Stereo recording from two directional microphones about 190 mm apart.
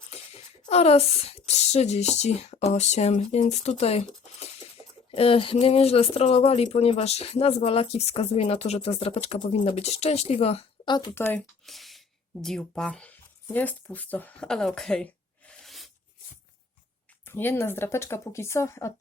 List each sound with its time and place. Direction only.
0.6 s speech: 30° left (ahead or behind)
11.1 s speech: 10° left (ahead or behind)
15.4 s a sound: centre (ahead or behind)
17.2 s speech: 10° left (ahead or behind)